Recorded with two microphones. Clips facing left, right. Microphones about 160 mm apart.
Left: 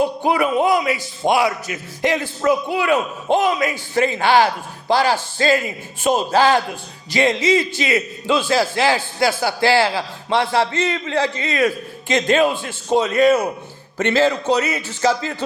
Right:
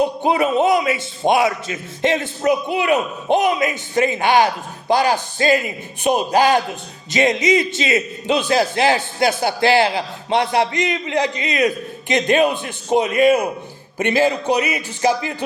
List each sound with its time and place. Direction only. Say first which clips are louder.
0.0 s a man's voice: right 1 dB; 20° right (ahead or behind)